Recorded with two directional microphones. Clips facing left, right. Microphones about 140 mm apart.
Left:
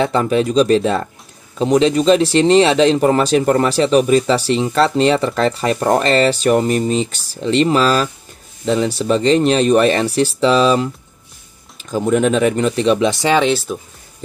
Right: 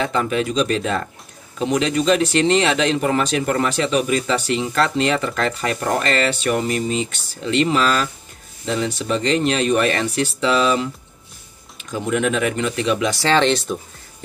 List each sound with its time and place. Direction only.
0.0 s speech: 35° left (ahead or behind)
13.3 s speech: 5° left (ahead or behind)